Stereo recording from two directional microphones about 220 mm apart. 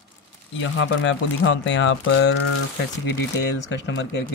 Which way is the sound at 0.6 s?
60° left (ahead or behind).